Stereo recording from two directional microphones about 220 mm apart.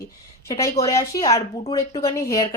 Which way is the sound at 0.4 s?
15° left (ahead or behind).